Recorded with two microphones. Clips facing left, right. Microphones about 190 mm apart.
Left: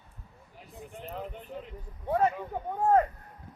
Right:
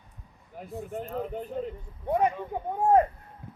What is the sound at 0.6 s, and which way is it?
Speech, 45° right (ahead or behind).